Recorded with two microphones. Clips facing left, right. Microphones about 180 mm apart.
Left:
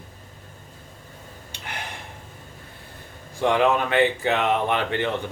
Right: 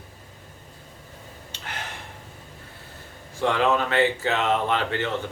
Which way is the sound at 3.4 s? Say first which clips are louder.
Left 2 dB; 15° left (ahead or behind).